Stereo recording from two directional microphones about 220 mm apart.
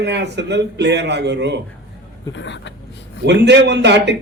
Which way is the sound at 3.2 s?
50° right (ahead or behind).